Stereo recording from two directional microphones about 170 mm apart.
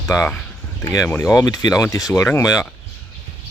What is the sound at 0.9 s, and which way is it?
Speech, 15° left (ahead or behind).